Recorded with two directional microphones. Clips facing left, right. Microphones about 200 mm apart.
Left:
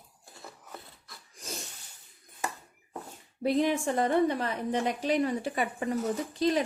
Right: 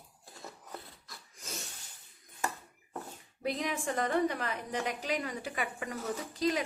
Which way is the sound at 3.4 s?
30° left (ahead or behind).